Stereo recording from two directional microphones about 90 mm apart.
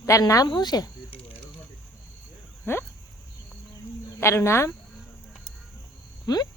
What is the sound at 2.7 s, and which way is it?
Speech, 25° left (ahead or behind).